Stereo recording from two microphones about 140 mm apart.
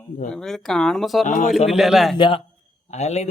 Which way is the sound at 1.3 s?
65° left (ahead or behind).